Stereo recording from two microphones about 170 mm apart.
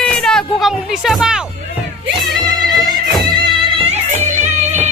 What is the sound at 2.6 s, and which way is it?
Music, 25° right (ahead or behind).